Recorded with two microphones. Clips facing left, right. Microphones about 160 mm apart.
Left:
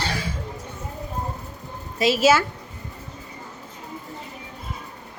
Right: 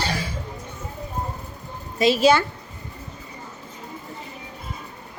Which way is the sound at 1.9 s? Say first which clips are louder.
Right 1 dB; 5° left (ahead or behind).